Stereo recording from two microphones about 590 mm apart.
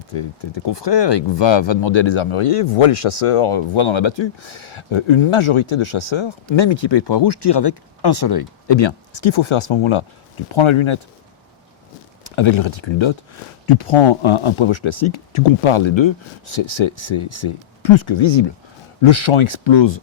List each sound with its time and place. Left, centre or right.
0.1 s speech: left
12.4 s speech: left